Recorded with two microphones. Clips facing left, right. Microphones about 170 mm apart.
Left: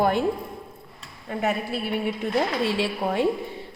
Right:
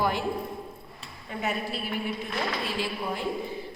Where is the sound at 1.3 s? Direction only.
55° left (ahead or behind).